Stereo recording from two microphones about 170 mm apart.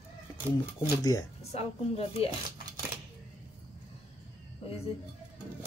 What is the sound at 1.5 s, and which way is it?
Speech, 35° left (ahead or behind).